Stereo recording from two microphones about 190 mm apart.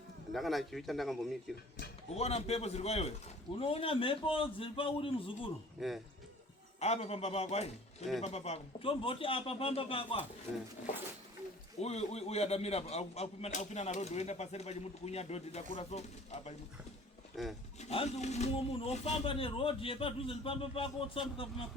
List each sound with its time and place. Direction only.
0.3 s a man's voice: centre (ahead or behind)
2.1 s a man's voice: 35° left (ahead or behind)
5.8 s a man's voice: centre (ahead or behind)
6.7 s a man's voice: 35° left (ahead or behind)
11.8 s a man's voice: 35° left (ahead or behind)
17.3 s speech: centre (ahead or behind)
17.7 s speech: 35° left (ahead or behind)